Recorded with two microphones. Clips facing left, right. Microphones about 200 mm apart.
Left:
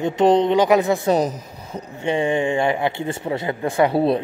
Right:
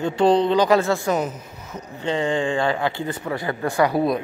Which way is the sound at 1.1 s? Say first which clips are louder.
Left 4 dB; 35° left (ahead or behind).